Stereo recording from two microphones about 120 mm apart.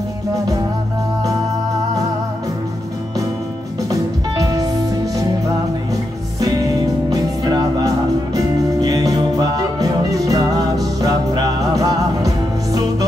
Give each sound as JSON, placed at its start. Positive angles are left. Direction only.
{"t": 3.9, "sound": "music", "side_deg": -30}
{"t": 7.1, "sound": "music", "side_deg": -30}